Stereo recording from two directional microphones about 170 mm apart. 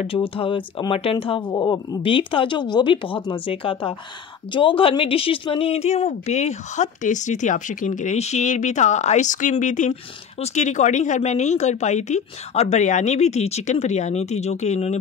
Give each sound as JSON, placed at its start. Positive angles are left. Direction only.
{"t": 0.0, "sound": "speech", "side_deg": 35}
{"t": 1.5, "sound": "speech", "side_deg": 20}